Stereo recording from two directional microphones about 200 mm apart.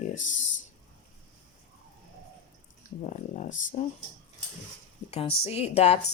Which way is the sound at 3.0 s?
35° left (ahead or behind).